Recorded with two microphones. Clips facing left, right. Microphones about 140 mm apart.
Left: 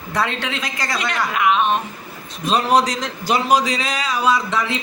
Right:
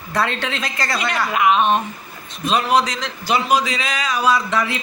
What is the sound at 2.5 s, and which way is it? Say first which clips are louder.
A man's voice: left 1 dB; 40° left (ahead or behind).